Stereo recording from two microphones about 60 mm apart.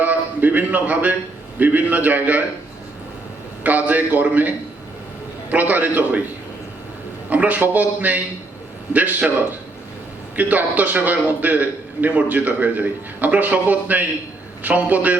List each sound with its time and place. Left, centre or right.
0.0 s a sound: right
1.5 s a man's voice: right
3.6 s a man's voice: right
7.3 s a man's voice: right
10.3 s a man's voice: right